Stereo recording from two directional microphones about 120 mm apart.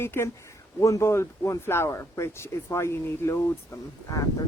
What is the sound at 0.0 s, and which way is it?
Speech, 20° left (ahead or behind).